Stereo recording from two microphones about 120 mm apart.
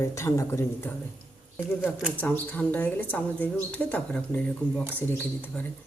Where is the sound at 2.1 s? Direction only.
15° left (ahead or behind).